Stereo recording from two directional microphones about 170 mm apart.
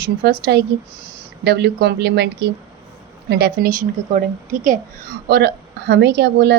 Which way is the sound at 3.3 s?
70° right (ahead or behind).